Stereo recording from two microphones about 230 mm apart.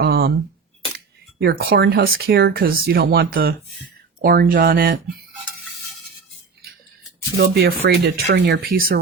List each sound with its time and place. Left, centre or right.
0.0 s a sound: right
0.9 s speech: right
7.3 s speech: right